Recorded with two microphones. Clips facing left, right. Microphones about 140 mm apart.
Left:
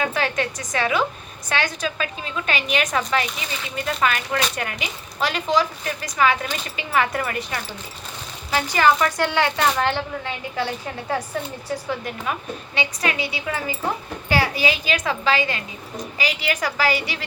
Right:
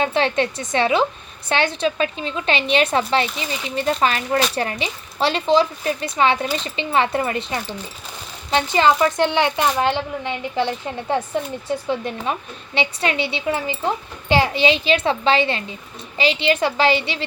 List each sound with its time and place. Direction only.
0.0 s a woman's voice: 25° right (ahead or behind)